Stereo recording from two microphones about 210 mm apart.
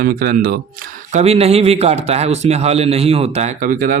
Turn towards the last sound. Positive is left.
turn(degrees=-40)  # may be behind; listen again after turning